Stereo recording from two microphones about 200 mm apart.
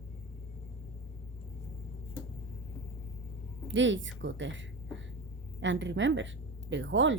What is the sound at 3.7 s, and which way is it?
A woman's voice, 70° right (ahead or behind).